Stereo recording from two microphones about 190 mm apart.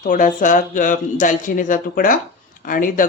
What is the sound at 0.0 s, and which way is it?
Speech, 45° left (ahead or behind).